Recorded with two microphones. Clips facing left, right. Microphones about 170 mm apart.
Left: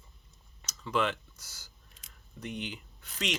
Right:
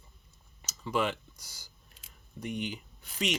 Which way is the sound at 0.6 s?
10° right (ahead or behind).